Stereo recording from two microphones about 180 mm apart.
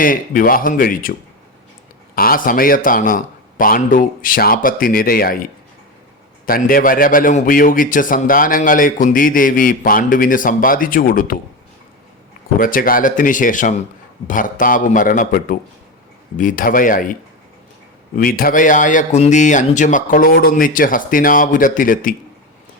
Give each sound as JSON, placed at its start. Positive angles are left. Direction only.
{"t": 0.0, "sound": "a man's voice", "side_deg": 50}
{"t": 2.1, "sound": "a man's voice", "side_deg": 55}
{"t": 12.5, "sound": "a man's voice", "side_deg": 50}
{"t": 18.2, "sound": "a man's voice", "side_deg": 55}